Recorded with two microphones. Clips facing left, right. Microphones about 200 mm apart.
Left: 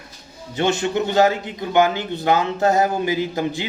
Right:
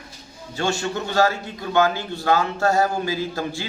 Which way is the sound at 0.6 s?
20° left (ahead or behind).